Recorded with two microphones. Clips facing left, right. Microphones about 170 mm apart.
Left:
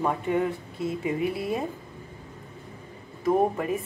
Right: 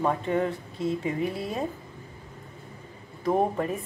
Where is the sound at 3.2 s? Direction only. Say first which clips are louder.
Left 1 dB; 10° left (ahead or behind).